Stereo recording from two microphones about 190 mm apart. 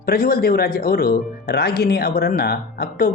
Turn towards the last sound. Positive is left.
turn(degrees=55)  # may be behind; listen again after turning